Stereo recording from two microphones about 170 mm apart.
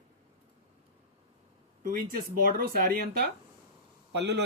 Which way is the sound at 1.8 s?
55° right (ahead or behind).